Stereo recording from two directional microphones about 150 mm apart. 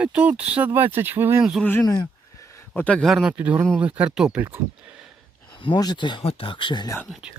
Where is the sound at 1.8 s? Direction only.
25° left (ahead or behind); by 4.6 s 15° right (ahead or behind).